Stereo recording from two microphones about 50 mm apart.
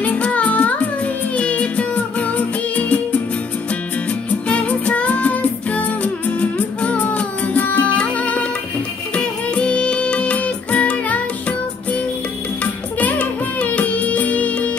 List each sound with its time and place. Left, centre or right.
0.0 s music: left
4.5 s music: left
13.0 s music: left